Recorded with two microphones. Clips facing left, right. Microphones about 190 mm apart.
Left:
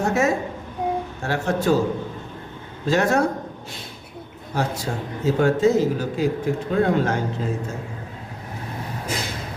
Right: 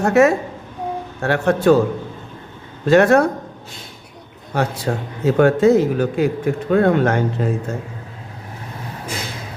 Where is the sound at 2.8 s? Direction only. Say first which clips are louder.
Right 7 dB; 60° right (ahead or behind).